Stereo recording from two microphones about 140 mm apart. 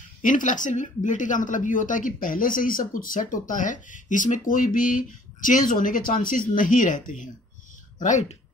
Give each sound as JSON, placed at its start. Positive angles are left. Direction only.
{"t": 0.2, "sound": "speech", "side_deg": 70}
{"t": 8.0, "sound": "speech", "side_deg": 55}